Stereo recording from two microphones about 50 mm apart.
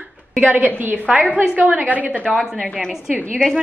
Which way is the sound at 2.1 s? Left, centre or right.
Left.